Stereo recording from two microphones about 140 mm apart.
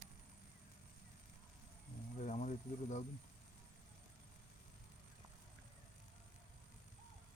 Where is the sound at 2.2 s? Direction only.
55° left (ahead or behind).